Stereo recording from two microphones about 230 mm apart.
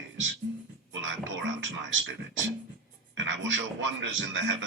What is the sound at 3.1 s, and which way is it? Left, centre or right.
Speech, right.